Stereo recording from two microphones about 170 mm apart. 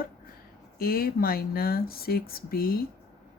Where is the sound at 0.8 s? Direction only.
60° left (ahead or behind).